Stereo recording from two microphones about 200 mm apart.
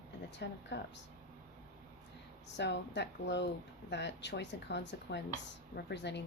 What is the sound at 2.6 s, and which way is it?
Speech, 60° left (ahead or behind).